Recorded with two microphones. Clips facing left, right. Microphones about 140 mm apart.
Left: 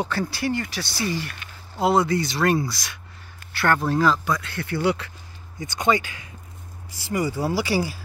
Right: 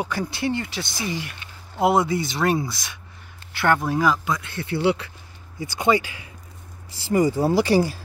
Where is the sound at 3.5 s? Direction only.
15° right (ahead or behind).